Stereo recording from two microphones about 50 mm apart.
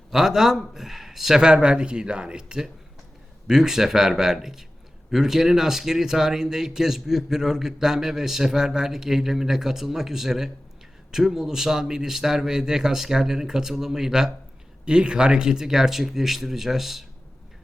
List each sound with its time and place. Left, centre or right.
0.1 s speech: centre
1.4 s speech: centre